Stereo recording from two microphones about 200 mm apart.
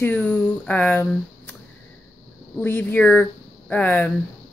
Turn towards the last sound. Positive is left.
turn(degrees=10)  # may be behind; listen again after turning